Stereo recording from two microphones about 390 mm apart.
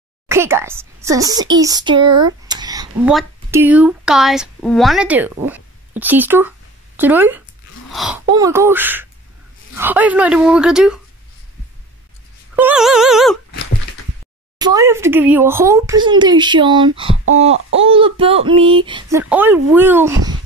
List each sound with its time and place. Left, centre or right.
0.3 s a woman's voice: centre
12.5 s speech: centre
14.6 s a child's voice: centre